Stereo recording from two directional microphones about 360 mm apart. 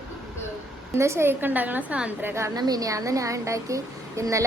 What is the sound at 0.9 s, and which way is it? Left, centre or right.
A woman's voice, centre.